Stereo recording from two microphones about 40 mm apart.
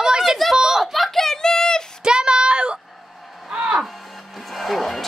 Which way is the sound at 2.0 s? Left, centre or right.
Right.